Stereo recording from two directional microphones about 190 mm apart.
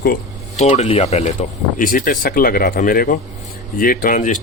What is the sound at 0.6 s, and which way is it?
Speech, 35° left (ahead or behind).